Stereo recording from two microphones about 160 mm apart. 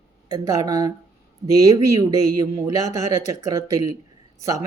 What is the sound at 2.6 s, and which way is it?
Speech, 20° right (ahead or behind).